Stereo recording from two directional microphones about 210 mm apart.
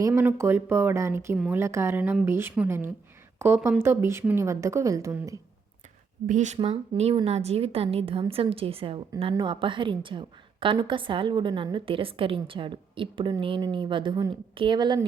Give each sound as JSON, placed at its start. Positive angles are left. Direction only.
{"t": 0.0, "sound": "a woman's voice", "side_deg": -10}
{"t": 6.2, "sound": "a woman's voice", "side_deg": -35}